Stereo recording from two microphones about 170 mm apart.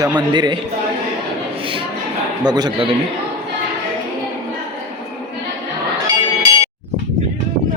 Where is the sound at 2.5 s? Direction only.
25° right (ahead or behind).